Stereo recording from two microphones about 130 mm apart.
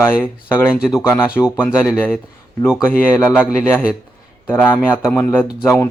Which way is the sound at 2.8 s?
15° left (ahead or behind).